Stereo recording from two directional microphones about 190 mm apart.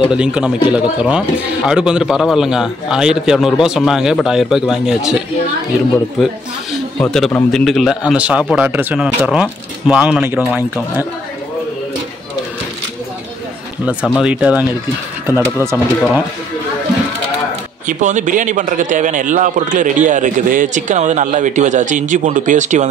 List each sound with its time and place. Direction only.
0.1 s a man's voice: 5° right (ahead or behind)
6.7 s a man's voice: centre (ahead or behind)
13.8 s a man's voice: 5° right (ahead or behind)
15.7 s a man's voice: 5° left (ahead or behind)
17.8 s a man's voice: 40° right (ahead or behind)